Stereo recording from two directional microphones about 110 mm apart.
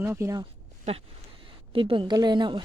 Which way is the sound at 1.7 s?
50° right (ahead or behind).